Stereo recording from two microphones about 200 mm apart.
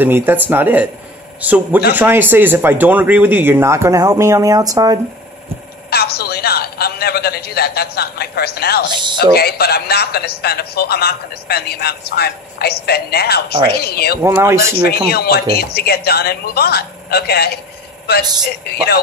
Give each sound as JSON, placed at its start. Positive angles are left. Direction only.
{"t": 0.0, "sound": "speech", "side_deg": -10}
{"t": 5.9, "sound": "a man's voice", "side_deg": 50}
{"t": 14.2, "sound": "speech", "side_deg": -15}
{"t": 15.0, "sound": "a man's voice", "side_deg": 50}